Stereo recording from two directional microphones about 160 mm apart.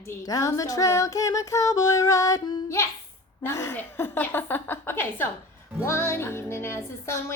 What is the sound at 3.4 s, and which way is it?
Music, 15° left (ahead or behind).